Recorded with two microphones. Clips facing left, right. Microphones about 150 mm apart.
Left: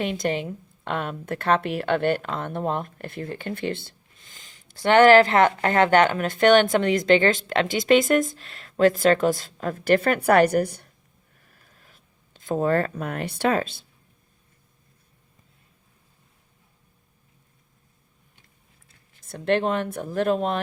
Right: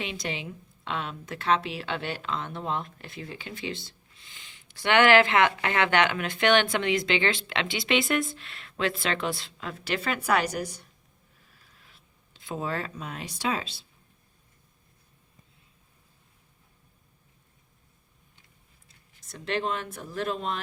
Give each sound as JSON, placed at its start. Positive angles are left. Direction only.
{"t": 0.0, "sound": "speech", "side_deg": 50}
{"t": 11.3, "sound": "writing", "side_deg": 55}
{"t": 18.9, "sound": "speech", "side_deg": 55}